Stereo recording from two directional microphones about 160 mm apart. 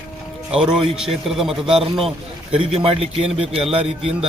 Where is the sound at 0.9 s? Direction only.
5° right (ahead or behind).